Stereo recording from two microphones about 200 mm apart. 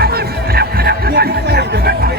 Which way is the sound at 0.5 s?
50° right (ahead or behind).